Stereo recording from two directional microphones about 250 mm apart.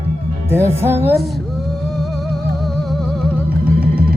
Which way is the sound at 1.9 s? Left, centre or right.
Centre.